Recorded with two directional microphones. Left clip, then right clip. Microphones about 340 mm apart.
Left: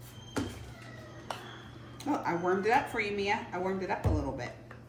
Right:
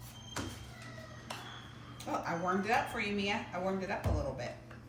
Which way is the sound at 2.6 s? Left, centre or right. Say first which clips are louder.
Left 4 dB; centre.